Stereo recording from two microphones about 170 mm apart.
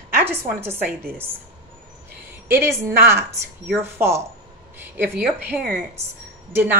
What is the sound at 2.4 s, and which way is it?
Speech, 15° right (ahead or behind).